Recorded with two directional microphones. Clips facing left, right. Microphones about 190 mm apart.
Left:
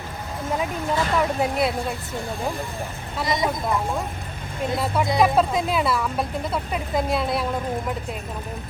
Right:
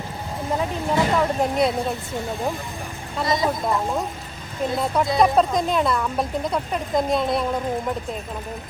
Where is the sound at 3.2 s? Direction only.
20° left (ahead or behind).